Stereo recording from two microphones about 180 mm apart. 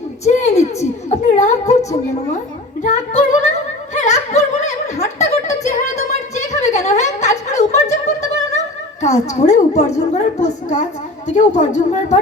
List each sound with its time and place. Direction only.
0.3 s speech: 40° left (ahead or behind)
2.8 s speech: 40° left (ahead or behind)
3.9 s a sound: 40° left (ahead or behind)
11.3 s speech: 40° left (ahead or behind)